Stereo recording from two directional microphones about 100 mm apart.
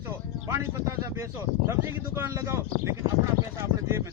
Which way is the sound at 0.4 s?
30° right (ahead or behind).